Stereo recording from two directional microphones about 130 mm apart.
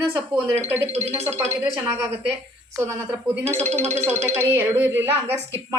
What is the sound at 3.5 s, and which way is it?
Speech, 65° right (ahead or behind).